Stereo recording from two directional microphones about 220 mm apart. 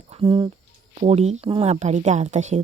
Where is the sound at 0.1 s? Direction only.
30° right (ahead or behind).